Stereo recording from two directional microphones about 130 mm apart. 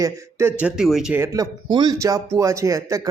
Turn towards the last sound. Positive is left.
turn(degrees=-25)  # may be behind; listen again after turning